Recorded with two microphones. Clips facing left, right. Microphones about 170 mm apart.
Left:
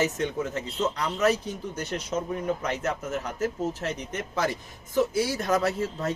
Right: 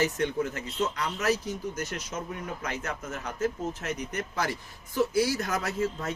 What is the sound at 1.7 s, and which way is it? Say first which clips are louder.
Speech: left 3 dB; 30° left (ahead or behind).